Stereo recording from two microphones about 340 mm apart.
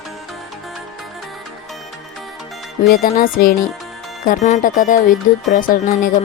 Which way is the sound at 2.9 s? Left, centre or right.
Left.